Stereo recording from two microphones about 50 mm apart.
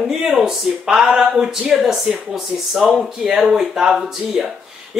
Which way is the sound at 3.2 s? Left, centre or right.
Centre.